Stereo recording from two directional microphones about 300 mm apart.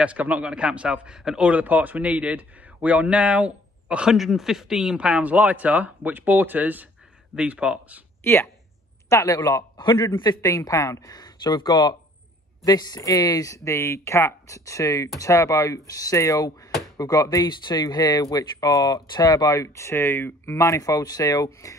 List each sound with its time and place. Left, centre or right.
0.0 s a man's voice: centre
8.2 s speech: centre